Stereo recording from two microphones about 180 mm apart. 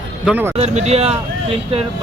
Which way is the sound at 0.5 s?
40° right (ahead or behind).